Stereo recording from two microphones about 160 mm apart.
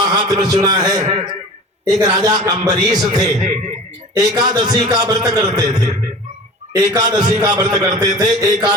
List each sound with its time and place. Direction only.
0.1 s a man's voice: 25° right (ahead or behind)
3.2 s speech: 45° right (ahead or behind)
4.1 s a man's voice: 25° right (ahead or behind)